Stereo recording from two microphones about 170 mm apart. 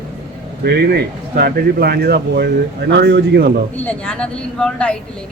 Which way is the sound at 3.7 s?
10° left (ahead or behind).